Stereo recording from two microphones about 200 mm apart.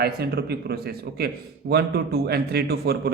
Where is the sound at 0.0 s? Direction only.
50° right (ahead or behind).